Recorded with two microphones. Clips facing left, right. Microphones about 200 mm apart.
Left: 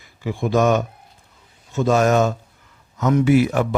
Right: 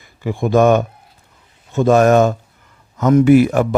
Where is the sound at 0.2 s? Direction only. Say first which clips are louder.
Right 5 dB; 50° right (ahead or behind).